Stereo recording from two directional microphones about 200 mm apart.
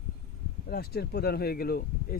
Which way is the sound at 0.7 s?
50° left (ahead or behind).